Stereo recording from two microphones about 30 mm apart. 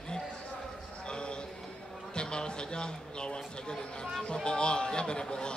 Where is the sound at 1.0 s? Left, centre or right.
Left.